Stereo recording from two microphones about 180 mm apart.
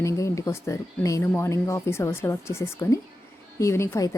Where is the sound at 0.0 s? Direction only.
15° left (ahead or behind).